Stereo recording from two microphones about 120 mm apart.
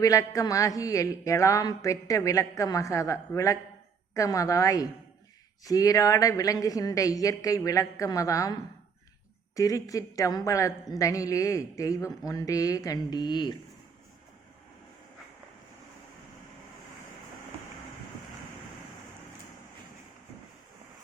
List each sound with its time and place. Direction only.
0.0 s a woman's voice: 30° left (ahead or behind)